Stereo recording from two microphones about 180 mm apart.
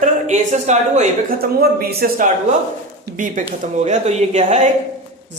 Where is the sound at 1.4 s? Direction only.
55° right (ahead or behind); by 4.6 s 40° right (ahead or behind).